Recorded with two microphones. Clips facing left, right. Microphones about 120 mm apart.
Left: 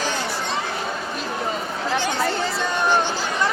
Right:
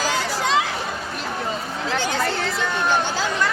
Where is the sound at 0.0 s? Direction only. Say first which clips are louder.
Right 2 dB; 90° right.